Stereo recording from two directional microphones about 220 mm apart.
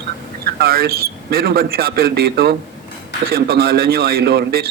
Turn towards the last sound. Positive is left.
turn(degrees=-45)  # may be behind; listen again after turning